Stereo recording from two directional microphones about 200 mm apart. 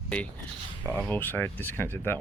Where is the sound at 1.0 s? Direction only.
10° left (ahead or behind).